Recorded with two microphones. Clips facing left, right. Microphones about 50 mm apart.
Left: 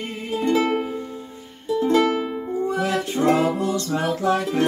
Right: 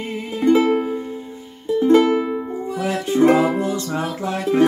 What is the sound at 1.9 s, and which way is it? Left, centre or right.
Music, right.